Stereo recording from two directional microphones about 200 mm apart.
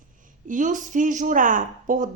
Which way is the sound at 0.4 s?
40° right (ahead or behind).